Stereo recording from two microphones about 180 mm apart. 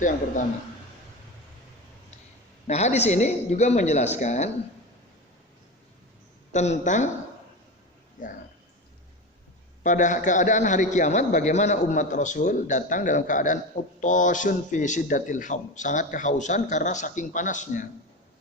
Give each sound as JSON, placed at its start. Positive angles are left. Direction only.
{"t": 2.6, "sound": "a woman's voice", "side_deg": 40}
{"t": 6.5, "sound": "a woman's voice", "side_deg": 40}
{"t": 8.2, "sound": "speech", "side_deg": 45}
{"t": 9.8, "sound": "speech", "side_deg": 45}